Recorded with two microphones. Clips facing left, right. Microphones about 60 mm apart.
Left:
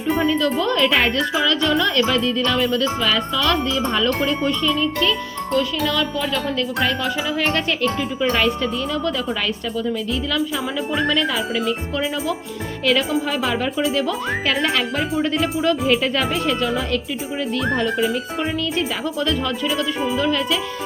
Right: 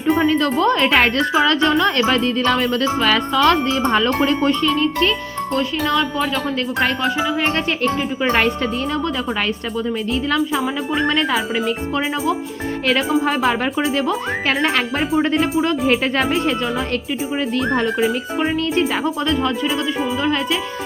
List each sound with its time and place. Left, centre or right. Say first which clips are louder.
0.2 s speech: right 2 dB; right
0.5 s speech: right 3 dB; right
0.9 s speech: right 3 dB; right
1.3 s speech: right 3 dB; right
5.5 s speech: right 1 dB; right
7.2 s music: right 2 dB; centre
8.2 s speech: right 1 dB; right
11.0 s speech: right 2 dB; right
11.9 s speech: right 5 dB; right
12.8 s speech: right 2 dB; right
19.0 s speech: right 3 dB; right
19.6 s speech: right 1 dB; centre
20.1 s speech: left 1 dB; right